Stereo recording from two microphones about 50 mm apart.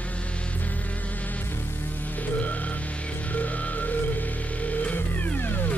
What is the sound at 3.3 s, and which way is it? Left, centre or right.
Music, left.